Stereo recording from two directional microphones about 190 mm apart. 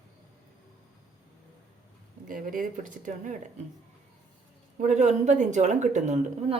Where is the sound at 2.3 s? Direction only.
45° right (ahead or behind).